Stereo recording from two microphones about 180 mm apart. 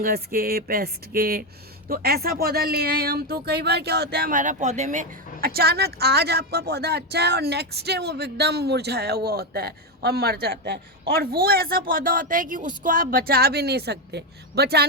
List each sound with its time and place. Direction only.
0.0 s speech: 55° right (ahead or behind)